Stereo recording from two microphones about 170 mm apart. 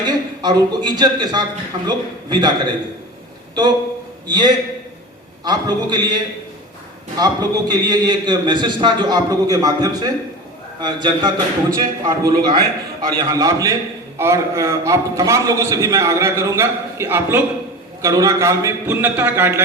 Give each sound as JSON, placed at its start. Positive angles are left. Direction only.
{"t": 0.0, "sound": "a man's voice", "side_deg": -25}
{"t": 7.7, "sound": "a man's voice", "side_deg": -25}